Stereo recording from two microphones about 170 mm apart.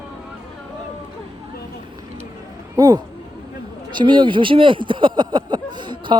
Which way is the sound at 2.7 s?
20° right (ahead or behind).